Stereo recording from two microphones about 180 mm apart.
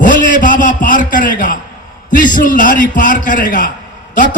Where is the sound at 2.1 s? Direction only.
45° left (ahead or behind).